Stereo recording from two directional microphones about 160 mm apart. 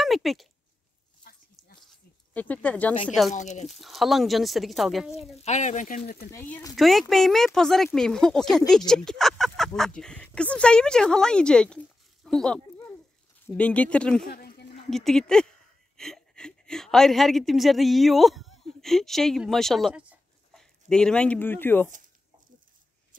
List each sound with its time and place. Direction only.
0.0 s speech: centre (ahead or behind)
1.8 s a sound: 5° left (ahead or behind)
3.3 s speech: 45° left (ahead or behind)
3.6 s speech: centre (ahead or behind)
5.4 s speech: 45° left (ahead or behind)
6.3 s speech: 10° left (ahead or behind)
14.2 s a sound: 75° left (ahead or behind)
14.9 s a woman's voice: centre (ahead or behind)
20.9 s speech: 5° left (ahead or behind)